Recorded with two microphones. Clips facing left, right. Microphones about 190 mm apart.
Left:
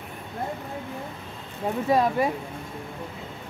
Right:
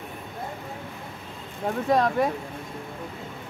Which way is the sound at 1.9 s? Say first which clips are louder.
Even; 5° left (ahead or behind).